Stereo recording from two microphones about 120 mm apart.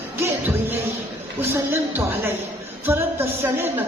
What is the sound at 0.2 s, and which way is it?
Music, 20° right (ahead or behind).